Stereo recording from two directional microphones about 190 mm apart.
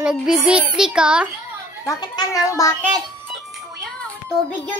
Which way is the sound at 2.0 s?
20° left (ahead or behind).